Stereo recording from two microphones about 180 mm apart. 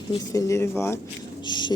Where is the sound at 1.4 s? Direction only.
25° left (ahead or behind).